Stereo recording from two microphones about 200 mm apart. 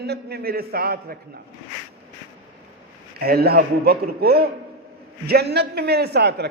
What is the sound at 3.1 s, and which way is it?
A man's voice, 50° right (ahead or behind).